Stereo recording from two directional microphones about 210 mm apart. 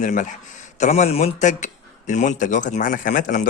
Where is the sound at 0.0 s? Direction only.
35° left (ahead or behind).